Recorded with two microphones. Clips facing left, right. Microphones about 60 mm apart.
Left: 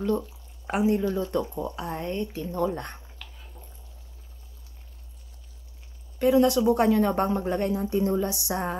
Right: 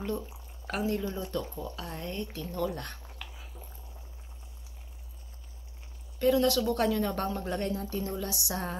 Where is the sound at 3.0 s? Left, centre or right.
Centre.